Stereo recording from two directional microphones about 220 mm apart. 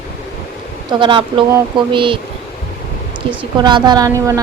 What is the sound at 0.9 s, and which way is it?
Speech, 20° right (ahead or behind).